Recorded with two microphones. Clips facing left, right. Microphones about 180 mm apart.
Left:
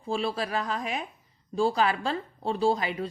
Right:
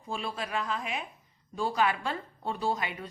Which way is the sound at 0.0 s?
30° left (ahead or behind).